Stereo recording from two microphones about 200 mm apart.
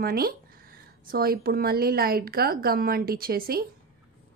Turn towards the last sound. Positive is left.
turn(degrees=-50)  # may be behind; listen again after turning